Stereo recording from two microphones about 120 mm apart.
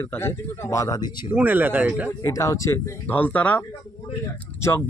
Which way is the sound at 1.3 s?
15° right (ahead or behind).